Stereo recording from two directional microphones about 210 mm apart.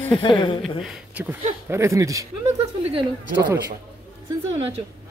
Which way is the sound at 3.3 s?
50° right (ahead or behind).